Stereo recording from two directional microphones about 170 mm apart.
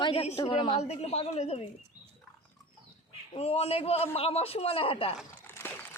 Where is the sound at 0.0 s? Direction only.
35° left (ahead or behind).